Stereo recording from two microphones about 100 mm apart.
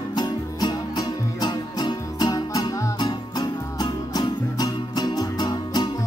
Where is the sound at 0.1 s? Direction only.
45° left (ahead or behind).